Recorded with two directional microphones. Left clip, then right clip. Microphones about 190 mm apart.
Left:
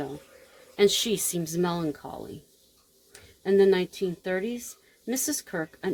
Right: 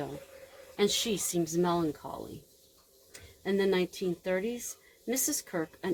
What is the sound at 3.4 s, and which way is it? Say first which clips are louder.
A woman's voice: left 7 dB; 50° left (ahead or behind).